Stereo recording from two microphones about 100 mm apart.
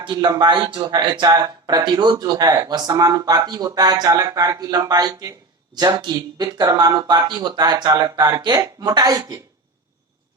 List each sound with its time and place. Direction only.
0.0 s speech: 45° right (ahead or behind)